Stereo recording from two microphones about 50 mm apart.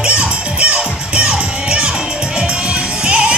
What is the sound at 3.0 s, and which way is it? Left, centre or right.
Music, right.